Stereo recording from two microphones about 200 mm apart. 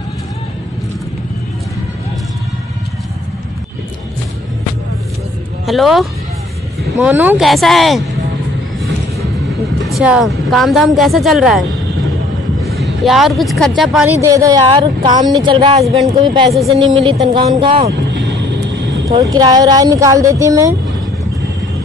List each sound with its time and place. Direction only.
5.7 s a woman's voice: centre (ahead or behind)
9.9 s a woman's voice: centre (ahead or behind)
12.6 s speech: centre (ahead or behind)
14.2 s speech: 15° right (ahead or behind)
16.5 s a woman's voice: centre (ahead or behind)
17.0 s speech: 25° right (ahead or behind)
19.0 s speech: 20° right (ahead or behind)